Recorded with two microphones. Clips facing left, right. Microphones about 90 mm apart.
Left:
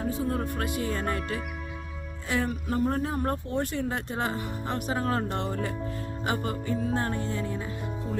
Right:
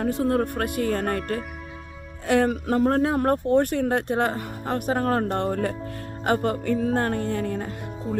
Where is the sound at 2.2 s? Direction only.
65° right (ahead or behind); by 3.2 s 90° right.